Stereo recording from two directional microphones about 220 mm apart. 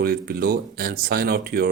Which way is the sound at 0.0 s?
45° right (ahead or behind).